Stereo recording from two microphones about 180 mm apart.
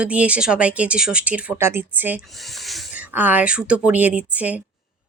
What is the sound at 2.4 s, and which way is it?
Speech, centre (ahead or behind).